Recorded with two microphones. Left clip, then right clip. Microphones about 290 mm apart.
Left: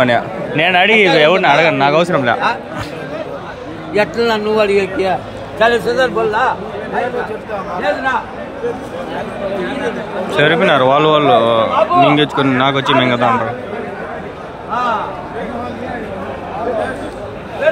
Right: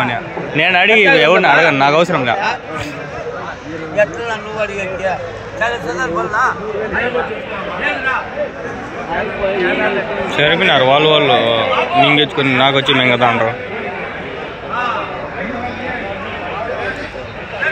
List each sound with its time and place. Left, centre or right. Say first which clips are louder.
0.0 s a man's voice: left 5 dB; centre
3.9 s a man's voice: left 2 dB; left
10.3 s a man's voice: left 1 dB; centre